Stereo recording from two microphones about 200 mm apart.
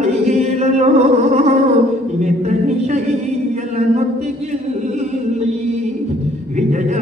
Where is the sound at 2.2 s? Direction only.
35° right (ahead or behind).